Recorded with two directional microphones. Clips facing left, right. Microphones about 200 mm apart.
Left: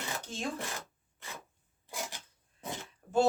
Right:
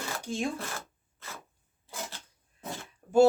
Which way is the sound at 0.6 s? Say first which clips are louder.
Right 1 dB; 15° left (ahead or behind).